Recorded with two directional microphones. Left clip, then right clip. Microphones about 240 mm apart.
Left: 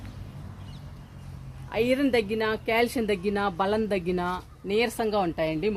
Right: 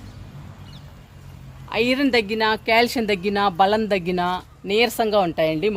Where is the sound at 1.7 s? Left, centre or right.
Right.